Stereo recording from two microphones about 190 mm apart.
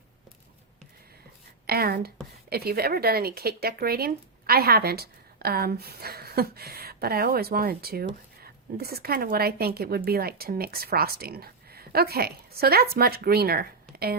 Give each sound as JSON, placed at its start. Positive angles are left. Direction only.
{"t": 1.6, "sound": "speech", "side_deg": -55}